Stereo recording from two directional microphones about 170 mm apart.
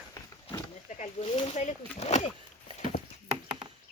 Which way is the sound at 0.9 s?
40° left (ahead or behind).